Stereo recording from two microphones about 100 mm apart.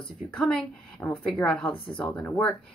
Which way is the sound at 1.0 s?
15° left (ahead or behind).